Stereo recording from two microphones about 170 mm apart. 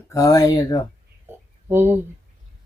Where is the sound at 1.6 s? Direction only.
15° right (ahead or behind).